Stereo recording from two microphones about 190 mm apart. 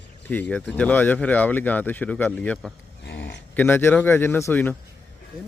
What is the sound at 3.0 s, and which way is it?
Livestock, 65° left (ahead or behind).